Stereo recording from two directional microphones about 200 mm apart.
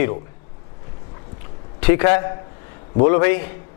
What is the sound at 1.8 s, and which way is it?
A man's voice, 10° left (ahead or behind).